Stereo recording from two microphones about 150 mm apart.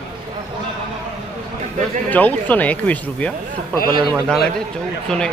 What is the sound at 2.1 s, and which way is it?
Speech, 10° left (ahead or behind).